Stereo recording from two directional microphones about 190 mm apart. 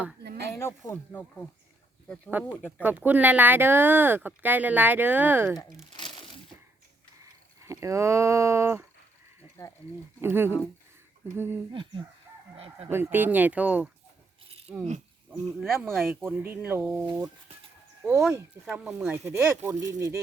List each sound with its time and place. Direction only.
0.6 s speech: 15° left (ahead or behind)
2.4 s speech: 10° right (ahead or behind)
7.6 s speech: 15° right (ahead or behind)
9.6 s speech: 15° left (ahead or behind)
10.2 s speech: 10° right (ahead or behind)
11.7 s speech: 25° right (ahead or behind)
12.5 s chicken: 30° right (ahead or behind)
12.9 s speech: 10° right (ahead or behind)
18.6 s speech: 5° right (ahead or behind)